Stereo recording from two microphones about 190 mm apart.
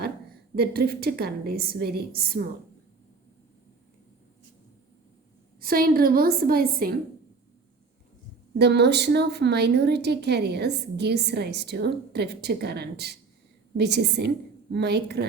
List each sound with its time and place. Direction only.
0.5 s a woman's voice: 55° right (ahead or behind)
5.5 s a woman's voice: 50° right (ahead or behind)
8.5 s a woman's voice: 60° right (ahead or behind)